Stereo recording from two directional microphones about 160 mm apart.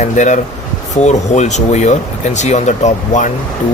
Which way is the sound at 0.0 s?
50° left (ahead or behind).